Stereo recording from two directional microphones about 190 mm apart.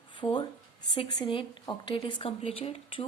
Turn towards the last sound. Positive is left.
turn(degrees=30)  # may be behind; listen again after turning